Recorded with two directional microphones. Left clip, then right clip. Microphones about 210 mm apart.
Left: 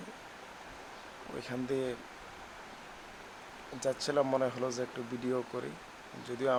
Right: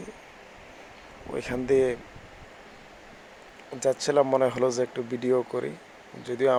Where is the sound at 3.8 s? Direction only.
20° right (ahead or behind).